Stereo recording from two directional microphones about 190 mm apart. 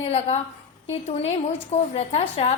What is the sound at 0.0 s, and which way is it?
A woman's voice, 35° left (ahead or behind).